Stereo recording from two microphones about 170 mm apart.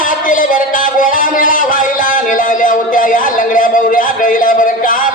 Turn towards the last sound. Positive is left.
turn(degrees=50)  # may be behind; listen again after turning